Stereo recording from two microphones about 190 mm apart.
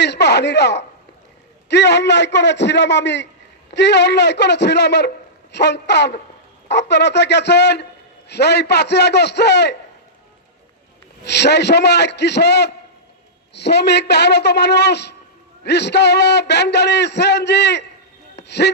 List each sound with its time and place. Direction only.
0.0 s speech: 65° left (ahead or behind)
11.2 s speech: 65° left (ahead or behind)
18.4 s gasp: 65° left (ahead or behind)